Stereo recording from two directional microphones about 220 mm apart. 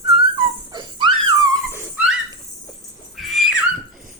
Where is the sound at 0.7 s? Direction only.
20° right (ahead or behind).